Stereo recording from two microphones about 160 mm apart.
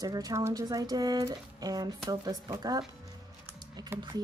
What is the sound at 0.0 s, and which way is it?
Speech, 25° right (ahead or behind).